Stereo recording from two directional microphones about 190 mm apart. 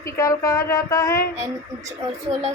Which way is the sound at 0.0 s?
15° left (ahead or behind).